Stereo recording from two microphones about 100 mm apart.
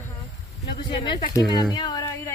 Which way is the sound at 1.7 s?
35° left (ahead or behind).